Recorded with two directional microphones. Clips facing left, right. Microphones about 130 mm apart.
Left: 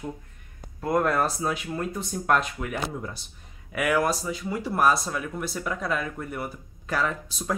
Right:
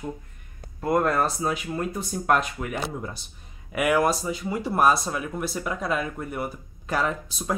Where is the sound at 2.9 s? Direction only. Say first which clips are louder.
Right 1 dB; 20° right (ahead or behind).